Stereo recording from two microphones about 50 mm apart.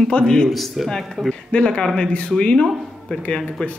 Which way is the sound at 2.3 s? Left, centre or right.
Centre.